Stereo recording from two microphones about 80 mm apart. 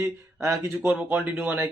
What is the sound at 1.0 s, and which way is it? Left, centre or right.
Speech, right.